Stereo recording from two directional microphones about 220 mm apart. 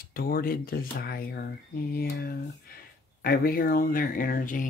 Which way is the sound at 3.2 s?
45° left (ahead or behind).